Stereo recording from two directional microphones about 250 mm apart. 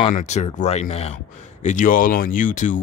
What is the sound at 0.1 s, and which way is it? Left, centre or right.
Speech, left.